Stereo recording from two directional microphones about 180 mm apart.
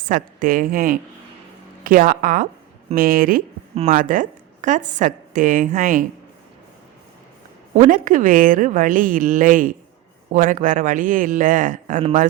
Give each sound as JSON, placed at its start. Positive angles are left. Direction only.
{"t": 0.1, "sound": "a woman's voice", "side_deg": -50}
{"t": 7.8, "sound": "a woman's voice", "side_deg": -50}